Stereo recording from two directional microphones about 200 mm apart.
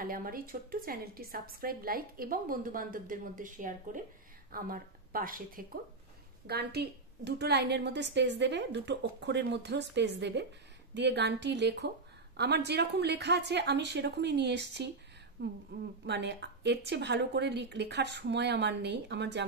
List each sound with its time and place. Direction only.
0.0 s a woman's voice: 45° right (ahead or behind)